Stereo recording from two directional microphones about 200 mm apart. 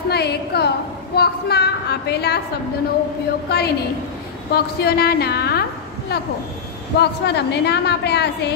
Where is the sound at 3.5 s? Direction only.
55° left (ahead or behind).